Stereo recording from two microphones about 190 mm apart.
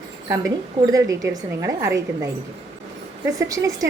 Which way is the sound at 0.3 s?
15° right (ahead or behind).